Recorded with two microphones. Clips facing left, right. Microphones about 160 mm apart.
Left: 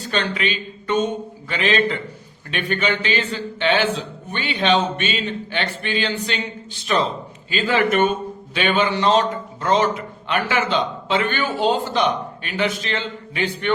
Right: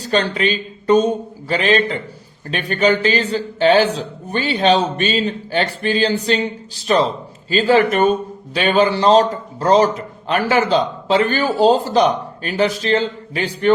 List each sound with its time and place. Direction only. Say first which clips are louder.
0.0 s a man's voice: right 5 dB; 40° right (ahead or behind)